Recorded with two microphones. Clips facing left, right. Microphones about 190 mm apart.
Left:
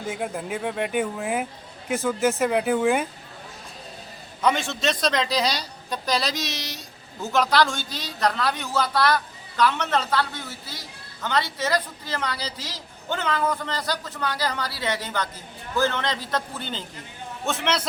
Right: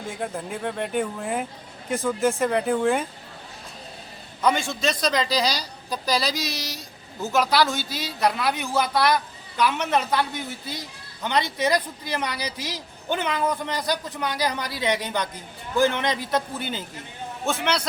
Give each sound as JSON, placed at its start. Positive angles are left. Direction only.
{"t": 0.1, "sound": "a woman's voice", "side_deg": 5}
{"t": 4.4, "sound": "a woman's voice", "side_deg": 0}